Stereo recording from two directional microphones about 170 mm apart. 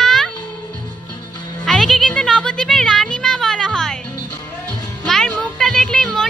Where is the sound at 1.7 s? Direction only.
5° left (ahead or behind).